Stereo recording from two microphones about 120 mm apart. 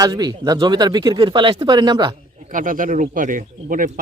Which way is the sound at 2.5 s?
90° right.